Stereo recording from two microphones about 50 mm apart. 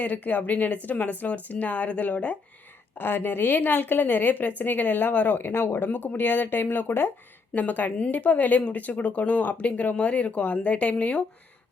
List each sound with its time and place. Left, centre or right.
0.0 s a woman's voice: left
3.0 s a woman's voice: left
7.5 s a woman's voice: left